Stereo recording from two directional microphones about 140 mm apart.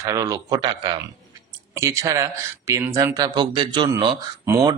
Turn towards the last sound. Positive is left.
turn(degrees=-20)  # may be behind; listen again after turning